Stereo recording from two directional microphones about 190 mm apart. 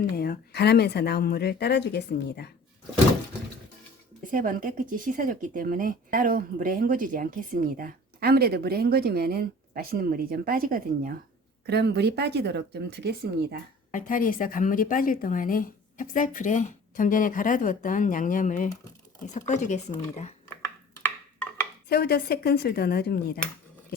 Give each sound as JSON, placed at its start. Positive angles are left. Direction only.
{"t": 0.0, "sound": "speech", "side_deg": 55}
{"t": 4.3, "sound": "speech", "side_deg": -45}
{"t": 11.6, "sound": "speech", "side_deg": -60}
{"t": 13.9, "sound": "a woman's voice", "side_deg": 45}
{"t": 20.5, "sound": "a sound", "side_deg": 15}
{"t": 21.8, "sound": "speech", "side_deg": 55}